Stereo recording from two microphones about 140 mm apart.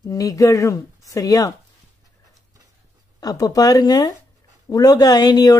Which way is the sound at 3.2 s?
25° left (ahead or behind).